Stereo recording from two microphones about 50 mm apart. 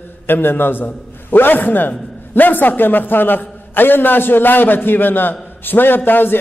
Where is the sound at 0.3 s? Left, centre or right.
Left.